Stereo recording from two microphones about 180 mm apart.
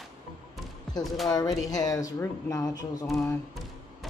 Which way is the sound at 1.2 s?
20° left (ahead or behind).